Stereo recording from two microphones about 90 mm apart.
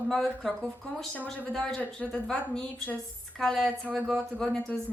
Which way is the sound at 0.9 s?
15° left (ahead or behind).